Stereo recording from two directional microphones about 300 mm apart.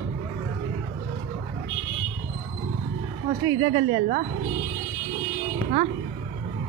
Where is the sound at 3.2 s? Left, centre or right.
Centre.